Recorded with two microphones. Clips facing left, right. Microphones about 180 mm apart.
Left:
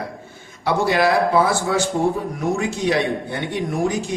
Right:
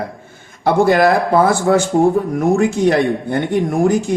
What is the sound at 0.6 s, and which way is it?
Speech, 50° right (ahead or behind).